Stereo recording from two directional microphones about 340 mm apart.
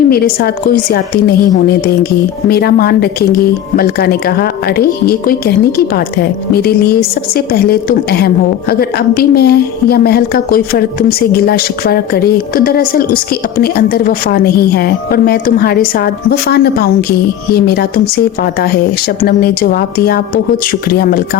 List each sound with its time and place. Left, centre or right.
0.1 s a woman's voice: left